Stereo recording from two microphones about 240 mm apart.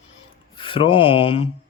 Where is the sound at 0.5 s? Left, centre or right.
Left.